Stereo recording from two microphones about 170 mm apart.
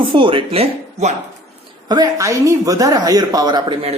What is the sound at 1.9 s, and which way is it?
Speech, 20° right (ahead or behind).